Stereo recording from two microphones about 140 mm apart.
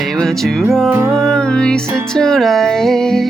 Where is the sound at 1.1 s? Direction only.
5° left (ahead or behind).